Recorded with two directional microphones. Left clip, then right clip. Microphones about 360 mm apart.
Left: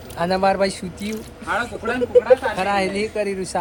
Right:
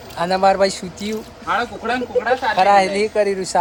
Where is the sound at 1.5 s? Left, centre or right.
Right.